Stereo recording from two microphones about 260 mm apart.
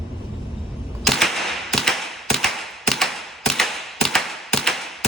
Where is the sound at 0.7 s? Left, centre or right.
Centre.